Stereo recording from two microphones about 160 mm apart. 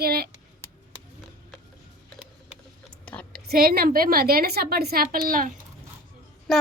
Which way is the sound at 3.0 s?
10° left (ahead or behind).